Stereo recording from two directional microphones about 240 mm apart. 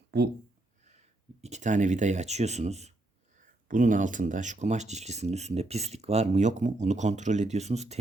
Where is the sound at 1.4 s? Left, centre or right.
Right.